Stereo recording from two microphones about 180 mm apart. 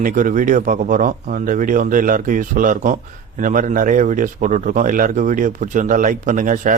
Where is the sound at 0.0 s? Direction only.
50° right (ahead or behind).